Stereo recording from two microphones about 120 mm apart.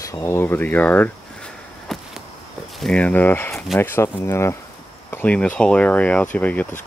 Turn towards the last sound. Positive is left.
turn(degrees=15)  # may be behind; listen again after turning